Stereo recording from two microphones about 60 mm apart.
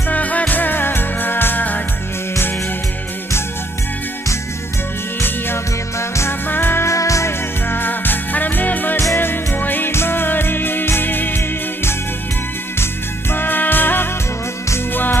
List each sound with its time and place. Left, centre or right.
0.1 s music: left
5.9 s music: left
6.5 s music: left
6.9 s music: left
7.7 s music: left
13.3 s music: left